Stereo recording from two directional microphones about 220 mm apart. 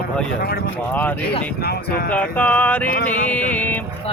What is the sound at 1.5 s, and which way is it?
Speech, 45° left (ahead or behind).